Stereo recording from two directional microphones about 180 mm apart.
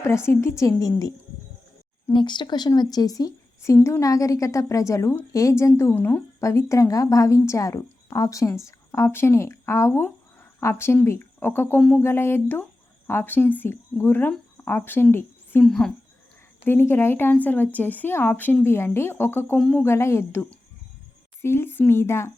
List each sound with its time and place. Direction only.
0.0 s a woman's voice: 15° left (ahead or behind)
2.1 s a woman's voice: 25° left (ahead or behind); by 19.8 s centre (ahead or behind)
19.8 s a woman's voice: 15° left (ahead or behind)